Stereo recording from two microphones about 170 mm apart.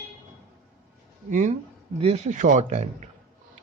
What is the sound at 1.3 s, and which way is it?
Speech, 50° right (ahead or behind).